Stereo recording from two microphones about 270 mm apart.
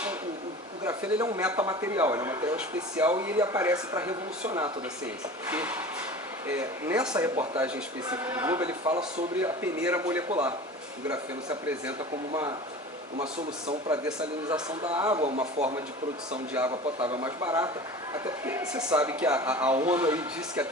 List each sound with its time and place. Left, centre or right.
0.9 s a man's voice: centre
13.8 s a man's voice: centre
15.1 s speech: right
17.0 s speech: right
17.2 s speech: centre